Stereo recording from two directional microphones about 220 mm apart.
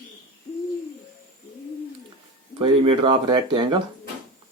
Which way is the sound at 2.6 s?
20° right (ahead or behind).